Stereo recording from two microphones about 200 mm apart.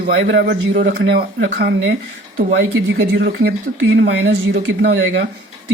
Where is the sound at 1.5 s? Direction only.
50° right (ahead or behind).